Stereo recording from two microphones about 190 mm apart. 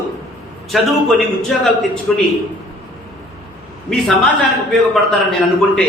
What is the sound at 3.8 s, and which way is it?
Speech, 5° left (ahead or behind).